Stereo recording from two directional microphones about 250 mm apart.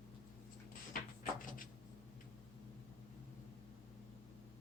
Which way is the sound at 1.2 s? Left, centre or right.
Left.